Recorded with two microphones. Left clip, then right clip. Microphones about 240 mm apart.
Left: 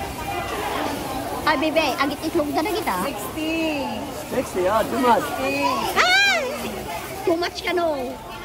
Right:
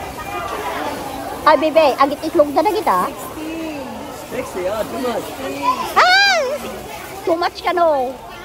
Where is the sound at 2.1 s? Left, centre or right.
Centre.